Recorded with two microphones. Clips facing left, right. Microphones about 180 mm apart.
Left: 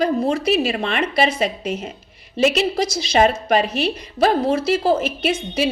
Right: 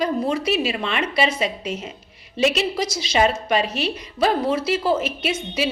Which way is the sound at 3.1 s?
45° left (ahead or behind).